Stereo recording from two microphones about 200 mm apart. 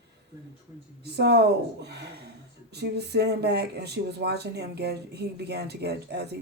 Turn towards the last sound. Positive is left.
turn(degrees=-55)  # may be behind; listen again after turning